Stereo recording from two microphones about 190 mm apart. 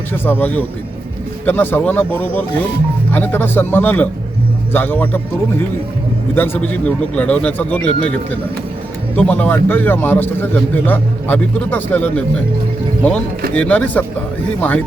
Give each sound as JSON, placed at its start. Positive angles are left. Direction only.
{"t": 0.1, "sound": "a man's voice", "side_deg": 10}
{"t": 9.1, "sound": "a man's voice", "side_deg": 5}
{"t": 13.5, "sound": "a man's voice", "side_deg": 5}